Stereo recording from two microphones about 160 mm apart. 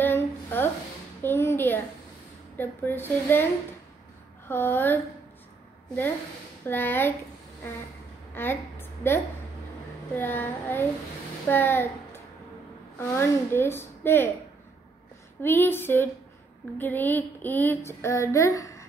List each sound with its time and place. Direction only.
0.0 s a sound: 10° left (ahead or behind)
2.5 s child singing: 15° left (ahead or behind)
4.5 s child singing: 15° left (ahead or behind)
6.6 s child singing: 15° left (ahead or behind)
8.4 s a woman's voice: 15° left (ahead or behind)
10.1 s child singing: 10° left (ahead or behind)
11.4 s a child's voice: 15° left (ahead or behind)
13.1 s child singing: 15° left (ahead or behind)
15.4 s child singing: 15° left (ahead or behind)